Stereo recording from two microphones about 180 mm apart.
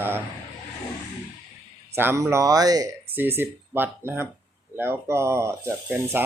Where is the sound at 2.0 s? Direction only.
10° right (ahead or behind).